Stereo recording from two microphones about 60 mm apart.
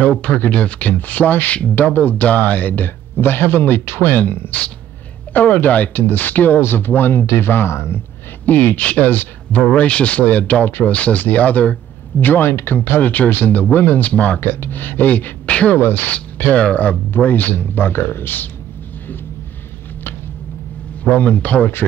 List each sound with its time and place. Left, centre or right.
0.2 s speech: left
8.5 s speech: left
9.8 s speech: centre
15.8 s speech: left
21.0 s speech: left